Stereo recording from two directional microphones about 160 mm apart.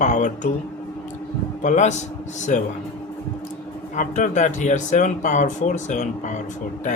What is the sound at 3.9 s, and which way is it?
Speech, 50° left (ahead or behind).